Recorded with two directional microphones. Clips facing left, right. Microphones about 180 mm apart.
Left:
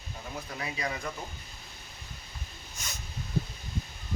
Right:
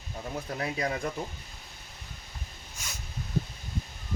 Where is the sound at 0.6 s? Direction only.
50° right (ahead or behind).